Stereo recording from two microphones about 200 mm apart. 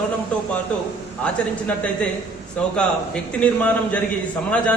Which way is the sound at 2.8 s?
5° left (ahead or behind).